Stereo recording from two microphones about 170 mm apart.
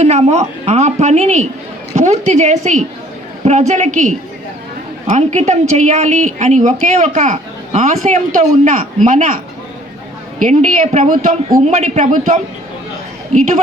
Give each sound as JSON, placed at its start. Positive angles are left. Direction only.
{"t": 0.0, "sound": "a woman's voice", "side_deg": -40}
{"t": 10.4, "sound": "speech", "side_deg": -45}